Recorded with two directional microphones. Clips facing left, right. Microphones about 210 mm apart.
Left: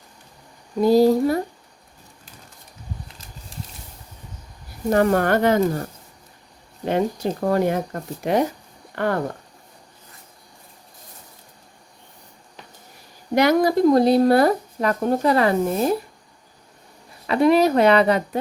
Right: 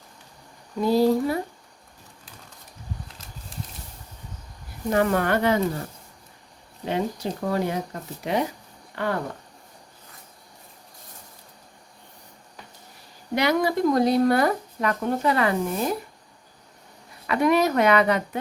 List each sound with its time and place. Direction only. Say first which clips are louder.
0.8 s speech: left 5 dB; 40° left (ahead or behind)
4.9 s speech: left 4 dB; 40° left (ahead or behind)
6.8 s speech: left 5 dB; 50° left (ahead or behind)
13.3 s speech: left 5 dB; 45° left (ahead or behind)
17.2 s speech: left 4 dB; 30° left (ahead or behind)